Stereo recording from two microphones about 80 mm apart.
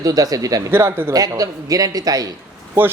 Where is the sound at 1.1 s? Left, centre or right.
Right.